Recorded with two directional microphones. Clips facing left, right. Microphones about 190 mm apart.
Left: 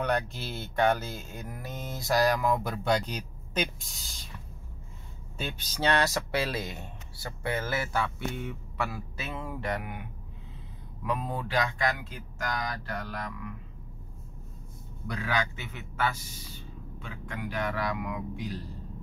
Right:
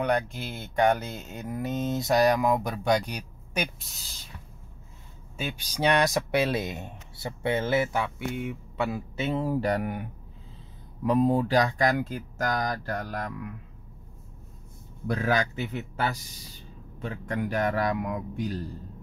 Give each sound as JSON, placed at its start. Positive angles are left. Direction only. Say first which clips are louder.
{"t": 0.0, "sound": "speech", "louder": "right 3 dB", "side_deg": -15}
{"t": 5.4, "sound": "speech", "louder": "right 3 dB", "side_deg": -10}
{"t": 15.0, "sound": "speech", "louder": "right 5 dB", "side_deg": -45}